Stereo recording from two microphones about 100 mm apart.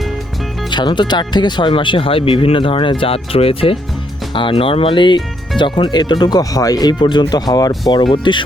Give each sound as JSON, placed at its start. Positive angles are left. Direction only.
{"t": 0.7, "sound": "speech", "side_deg": 50}
{"t": 8.1, "sound": "speech", "side_deg": 55}